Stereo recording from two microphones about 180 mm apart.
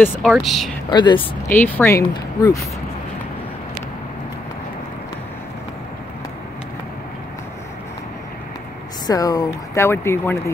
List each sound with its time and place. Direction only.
0.3 s speech: centre (ahead or behind)
0.8 s speech: 25° left (ahead or behind)
1.5 s speech: 10° left (ahead or behind)
9.0 s speech: 20° left (ahead or behind)